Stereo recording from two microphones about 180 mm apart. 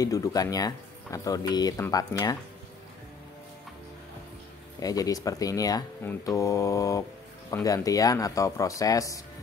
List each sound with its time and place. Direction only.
0.0 s speech: 20° left (ahead or behind)
4.7 s speech: 20° left (ahead or behind)